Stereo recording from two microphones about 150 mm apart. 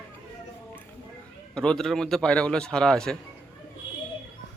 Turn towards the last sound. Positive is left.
turn(degrees=5)  # may be behind; listen again after turning